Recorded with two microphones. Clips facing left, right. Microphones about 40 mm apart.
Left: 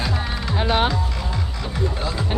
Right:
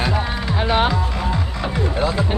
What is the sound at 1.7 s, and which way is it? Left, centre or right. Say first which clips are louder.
Speech: right 5 dB; right.